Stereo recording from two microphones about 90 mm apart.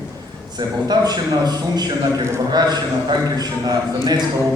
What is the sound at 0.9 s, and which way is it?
A man's voice, 50° right (ahead or behind).